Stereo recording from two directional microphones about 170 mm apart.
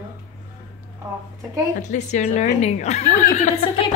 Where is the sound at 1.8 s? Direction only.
45° left (ahead or behind).